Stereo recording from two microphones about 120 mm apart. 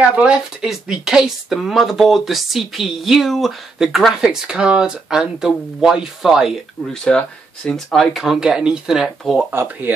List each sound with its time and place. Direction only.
0.0 s speech: 10° right (ahead or behind)
7.1 s speech: 5° left (ahead or behind)
9.5 s speech: 15° right (ahead or behind)